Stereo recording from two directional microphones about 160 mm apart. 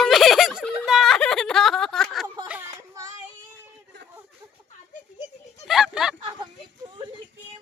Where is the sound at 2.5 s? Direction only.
15° right (ahead or behind).